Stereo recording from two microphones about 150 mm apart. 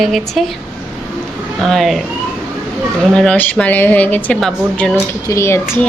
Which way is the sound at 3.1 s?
10° left (ahead or behind).